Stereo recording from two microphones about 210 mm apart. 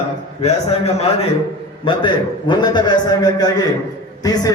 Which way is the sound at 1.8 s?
25° left (ahead or behind).